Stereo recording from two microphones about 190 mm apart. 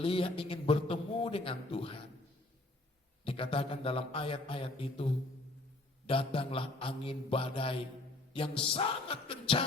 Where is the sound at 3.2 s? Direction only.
30° left (ahead or behind).